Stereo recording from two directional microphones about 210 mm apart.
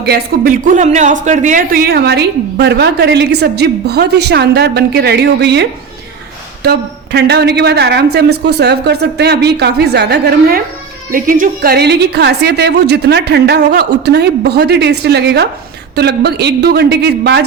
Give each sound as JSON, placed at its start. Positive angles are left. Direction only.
{"t": 0.0, "sound": "speech", "side_deg": -45}
{"t": 11.1, "sound": "speech", "side_deg": -40}